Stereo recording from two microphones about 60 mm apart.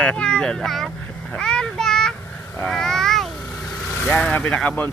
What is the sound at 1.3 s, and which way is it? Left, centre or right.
A child's voice, centre.